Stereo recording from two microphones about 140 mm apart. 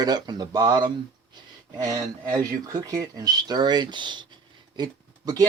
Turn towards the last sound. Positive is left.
turn(degrees=-30)  # may be behind; listen again after turning